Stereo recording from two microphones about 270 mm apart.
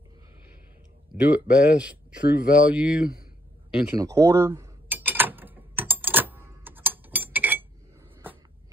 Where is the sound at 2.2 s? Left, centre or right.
Left.